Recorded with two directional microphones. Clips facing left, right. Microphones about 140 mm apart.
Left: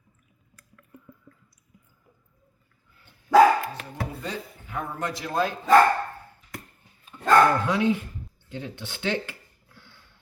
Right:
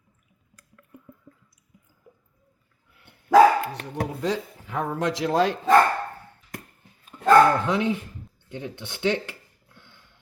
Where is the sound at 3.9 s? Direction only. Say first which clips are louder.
Right 9 dB; 90° right.